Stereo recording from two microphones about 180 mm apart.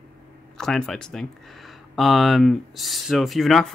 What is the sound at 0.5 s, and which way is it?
Speech, 5° left (ahead or behind).